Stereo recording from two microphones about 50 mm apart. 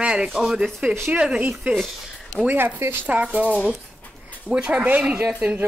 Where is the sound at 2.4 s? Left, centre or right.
Right.